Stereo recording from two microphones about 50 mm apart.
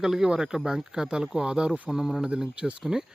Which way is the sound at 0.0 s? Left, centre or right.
Centre.